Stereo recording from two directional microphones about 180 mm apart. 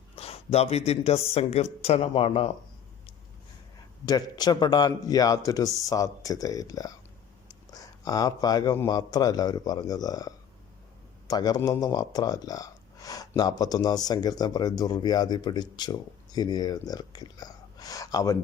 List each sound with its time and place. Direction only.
0.2 s speech: 35° left (ahead or behind)
4.0 s speech: 20° left (ahead or behind)